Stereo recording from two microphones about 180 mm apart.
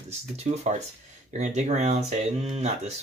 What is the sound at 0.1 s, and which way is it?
Speech, 35° right (ahead or behind).